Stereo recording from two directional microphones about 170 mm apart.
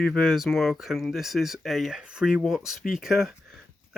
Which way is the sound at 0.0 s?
5° left (ahead or behind).